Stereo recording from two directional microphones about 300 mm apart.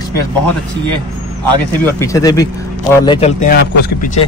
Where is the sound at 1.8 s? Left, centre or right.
Centre; by 4.1 s left.